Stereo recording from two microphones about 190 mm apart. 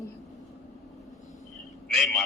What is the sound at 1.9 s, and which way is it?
Speech, centre (ahead or behind).